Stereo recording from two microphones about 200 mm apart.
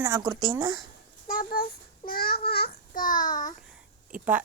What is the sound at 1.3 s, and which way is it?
A child's voice, 45° left (ahead or behind).